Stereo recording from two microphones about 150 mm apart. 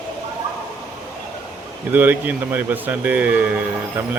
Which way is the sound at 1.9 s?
10° right (ahead or behind).